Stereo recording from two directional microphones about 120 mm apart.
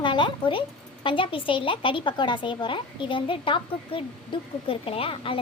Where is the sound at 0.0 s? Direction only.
40° left (ahead or behind).